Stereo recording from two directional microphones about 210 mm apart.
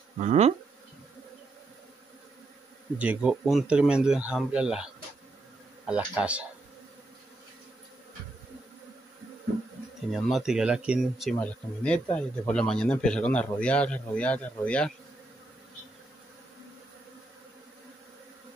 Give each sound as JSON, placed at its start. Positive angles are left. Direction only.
{"t": 0.2, "sound": "insect", "side_deg": -30}
{"t": 3.0, "sound": "speech", "side_deg": -5}
{"t": 5.9, "sound": "speech", "side_deg": -5}
{"t": 10.1, "sound": "speech", "side_deg": 0}